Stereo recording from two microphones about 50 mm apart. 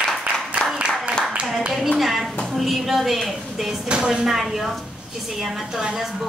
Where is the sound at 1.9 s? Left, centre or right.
Centre.